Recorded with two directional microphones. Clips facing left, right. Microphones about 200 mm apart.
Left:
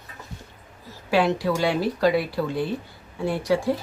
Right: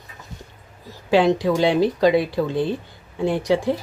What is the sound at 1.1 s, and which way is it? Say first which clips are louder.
Speech: right 4 dB; 20° right (ahead or behind).